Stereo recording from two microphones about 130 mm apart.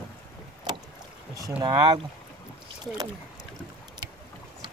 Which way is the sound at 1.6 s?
30° right (ahead or behind).